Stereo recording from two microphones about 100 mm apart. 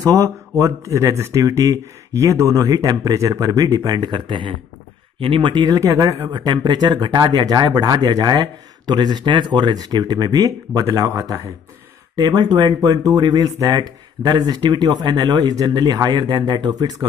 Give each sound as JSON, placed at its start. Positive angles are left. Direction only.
{"t": 0.0, "sound": "speech", "side_deg": -35}
{"t": 5.7, "sound": "speech", "side_deg": -35}